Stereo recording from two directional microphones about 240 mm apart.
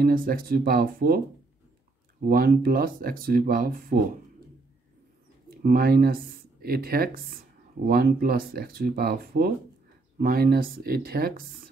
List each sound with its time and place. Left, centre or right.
0.0 s speech: right
2.2 s speech: right
5.6 s speech: right